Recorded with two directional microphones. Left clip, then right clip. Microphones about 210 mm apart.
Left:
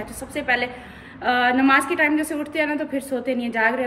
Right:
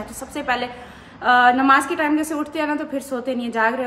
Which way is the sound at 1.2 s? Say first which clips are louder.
Right 4 dB; 15° right (ahead or behind).